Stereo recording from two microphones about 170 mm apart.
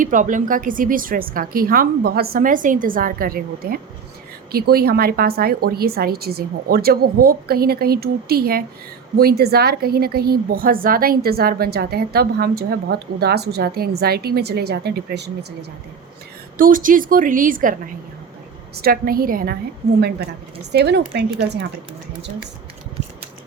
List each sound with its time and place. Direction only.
0.0 s a woman's voice: 50° right (ahead or behind); by 15.3 s 75° right (ahead or behind)
16.6 s a woman's voice: 55° right (ahead or behind)
20.0 s a woman's voice: 70° right (ahead or behind)